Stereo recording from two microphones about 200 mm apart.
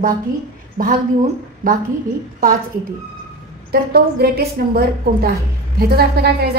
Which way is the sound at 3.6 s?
50° right (ahead or behind).